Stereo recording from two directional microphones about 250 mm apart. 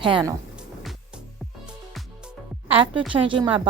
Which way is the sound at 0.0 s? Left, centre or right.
Centre.